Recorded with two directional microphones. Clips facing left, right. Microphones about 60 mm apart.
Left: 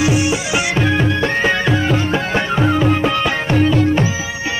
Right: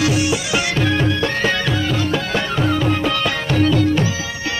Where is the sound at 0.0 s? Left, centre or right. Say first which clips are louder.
Left 2 dB; left.